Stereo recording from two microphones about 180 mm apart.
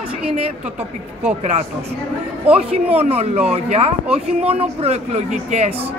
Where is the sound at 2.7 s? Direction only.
35° right (ahead or behind).